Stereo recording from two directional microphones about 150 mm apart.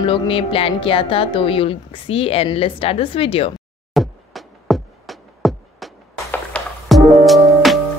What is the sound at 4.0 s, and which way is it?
Music, centre (ahead or behind).